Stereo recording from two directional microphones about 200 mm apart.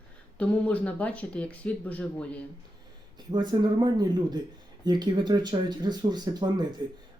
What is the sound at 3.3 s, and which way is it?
Speech, 20° right (ahead or behind).